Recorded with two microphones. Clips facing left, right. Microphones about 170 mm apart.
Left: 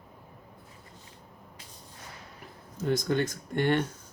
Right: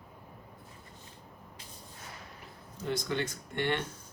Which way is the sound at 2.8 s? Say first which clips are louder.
Left 6 dB; 45° left (ahead or behind).